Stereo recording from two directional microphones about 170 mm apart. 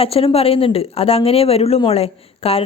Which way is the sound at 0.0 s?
35° left (ahead or behind).